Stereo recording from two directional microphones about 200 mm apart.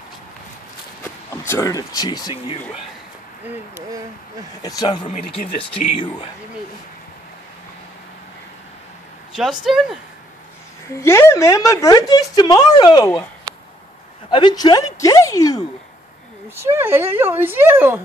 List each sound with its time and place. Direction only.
1.3 s speech: 10° left (ahead or behind); by 2.6 s 30° left (ahead or behind)
3.4 s speech: 10° right (ahead or behind)
4.6 s speech: 20° left (ahead or behind)
5.0 s speech: 35° left (ahead or behind)
5.6 s speech: 25° left (ahead or behind)
9.3 s speech: centre (ahead or behind)
11.0 s speech: 15° left (ahead or behind)
14.3 s a woman's voice: 20° left (ahead or behind)
16.5 s speech: 10° right (ahead or behind)